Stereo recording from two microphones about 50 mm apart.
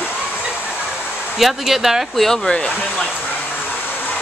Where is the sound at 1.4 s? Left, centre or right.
Centre.